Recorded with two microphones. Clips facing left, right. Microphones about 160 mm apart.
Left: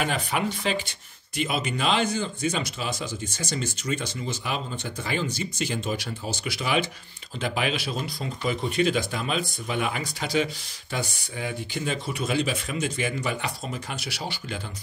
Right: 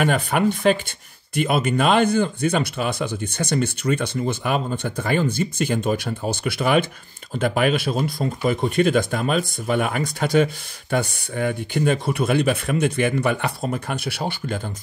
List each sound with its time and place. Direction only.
0.0 s speech: 55° right (ahead or behind)